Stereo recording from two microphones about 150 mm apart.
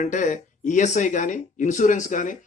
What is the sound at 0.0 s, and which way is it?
Speech, 55° left (ahead or behind).